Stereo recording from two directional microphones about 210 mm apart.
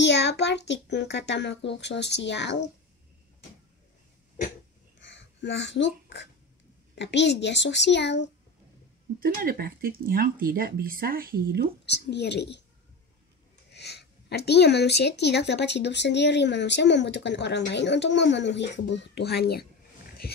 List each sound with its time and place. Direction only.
0.0 s speech: 55° left (ahead or behind)
5.0 s a sound: 60° left (ahead or behind)
7.0 s speech: 55° left (ahead or behind)
9.2 s speech: 45° right (ahead or behind)
11.8 s speech: 55° left (ahead or behind)
13.7 s speech: 50° left (ahead or behind)
20.2 s a sound: 50° left (ahead or behind)